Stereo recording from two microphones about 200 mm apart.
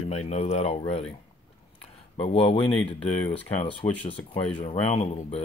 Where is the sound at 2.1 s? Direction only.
30° left (ahead or behind).